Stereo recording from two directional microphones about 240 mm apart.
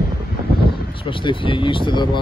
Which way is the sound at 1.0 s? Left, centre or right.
Left.